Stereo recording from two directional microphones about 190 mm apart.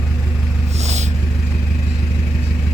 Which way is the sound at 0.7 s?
35° right (ahead or behind).